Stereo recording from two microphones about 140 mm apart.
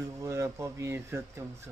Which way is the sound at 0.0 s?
25° right (ahead or behind).